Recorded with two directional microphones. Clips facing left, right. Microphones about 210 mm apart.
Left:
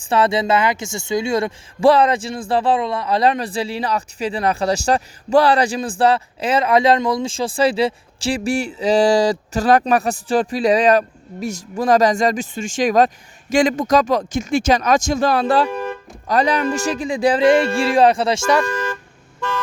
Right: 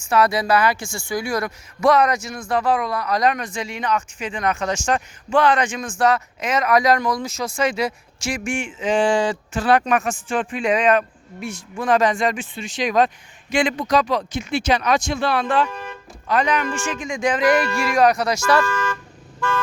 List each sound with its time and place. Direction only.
0.1 s speech: 25° left (ahead or behind)